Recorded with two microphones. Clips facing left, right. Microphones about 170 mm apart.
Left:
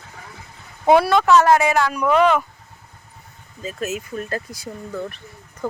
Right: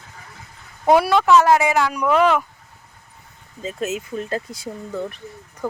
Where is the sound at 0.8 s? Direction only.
5° right (ahead or behind).